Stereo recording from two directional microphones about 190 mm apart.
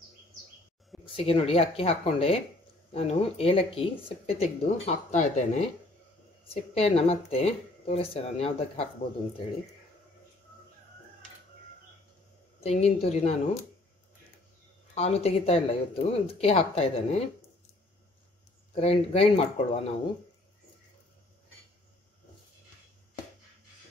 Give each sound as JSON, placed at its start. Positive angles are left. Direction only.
{"t": 1.0, "sound": "speech", "side_deg": 30}
{"t": 12.5, "sound": "speech", "side_deg": 35}
{"t": 15.0, "sound": "speech", "side_deg": 35}
{"t": 18.8, "sound": "speech", "side_deg": 30}